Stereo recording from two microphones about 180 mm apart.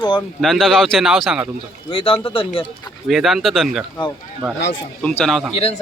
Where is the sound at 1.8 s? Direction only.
30° left (ahead or behind).